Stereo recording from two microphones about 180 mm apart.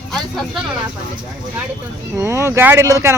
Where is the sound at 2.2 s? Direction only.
15° right (ahead or behind).